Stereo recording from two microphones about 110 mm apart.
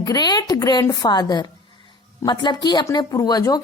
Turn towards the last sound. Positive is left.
turn(degrees=35)  # may be behind; listen again after turning